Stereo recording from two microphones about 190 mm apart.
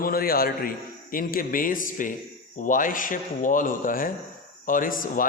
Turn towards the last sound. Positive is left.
turn(degrees=45)  # may be behind; listen again after turning